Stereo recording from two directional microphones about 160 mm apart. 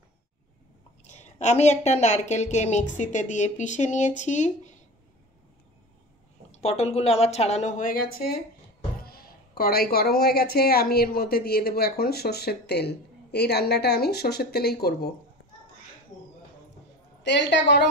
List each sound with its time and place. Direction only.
1.0 s speech: 45° left (ahead or behind)
6.5 s speech: 45° left (ahead or behind); by 8.4 s 70° left (ahead or behind)
9.0 s a sound: 70° left (ahead or behind)
9.6 s speech: 70° left (ahead or behind)
17.2 s a woman's voice: 90° left